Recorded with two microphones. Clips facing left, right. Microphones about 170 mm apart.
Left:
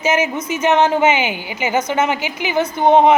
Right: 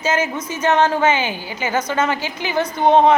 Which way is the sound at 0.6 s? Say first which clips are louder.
Left 2 dB; 20° left (ahead or behind).